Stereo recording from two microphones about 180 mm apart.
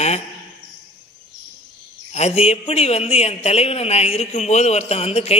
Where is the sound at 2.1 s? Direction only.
35° left (ahead or behind).